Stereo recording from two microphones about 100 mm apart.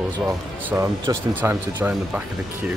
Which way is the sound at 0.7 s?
20° right (ahead or behind).